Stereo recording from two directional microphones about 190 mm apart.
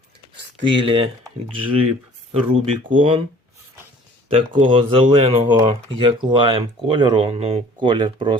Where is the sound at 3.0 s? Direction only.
30° right (ahead or behind).